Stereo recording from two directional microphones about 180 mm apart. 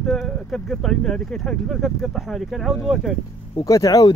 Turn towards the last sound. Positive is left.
turn(degrees=20)  # may be behind; listen again after turning